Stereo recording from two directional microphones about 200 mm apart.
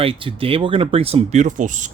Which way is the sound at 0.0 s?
25° right (ahead or behind).